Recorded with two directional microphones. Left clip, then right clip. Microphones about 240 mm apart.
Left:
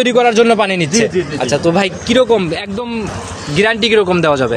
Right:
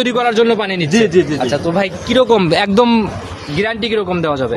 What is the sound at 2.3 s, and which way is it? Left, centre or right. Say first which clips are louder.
Speech: right 4 dB; right.